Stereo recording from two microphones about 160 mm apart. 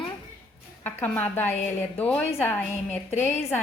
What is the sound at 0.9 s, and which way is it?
A woman's voice, 10° left (ahead or behind).